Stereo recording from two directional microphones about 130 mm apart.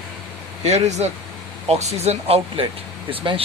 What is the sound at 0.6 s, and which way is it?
Speech, 60° right (ahead or behind).